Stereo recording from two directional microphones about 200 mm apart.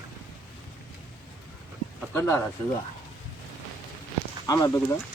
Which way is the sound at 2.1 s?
10° left (ahead or behind).